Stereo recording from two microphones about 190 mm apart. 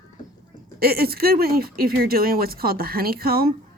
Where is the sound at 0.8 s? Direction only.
55° right (ahead or behind).